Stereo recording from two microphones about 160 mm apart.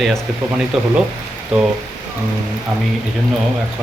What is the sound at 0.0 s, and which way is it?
Speech, 5° right (ahead or behind).